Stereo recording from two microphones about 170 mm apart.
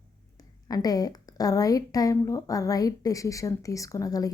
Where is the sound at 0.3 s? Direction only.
20° left (ahead or behind).